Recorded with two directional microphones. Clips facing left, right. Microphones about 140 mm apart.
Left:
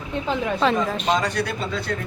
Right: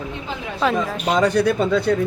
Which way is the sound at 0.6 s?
5° right (ahead or behind).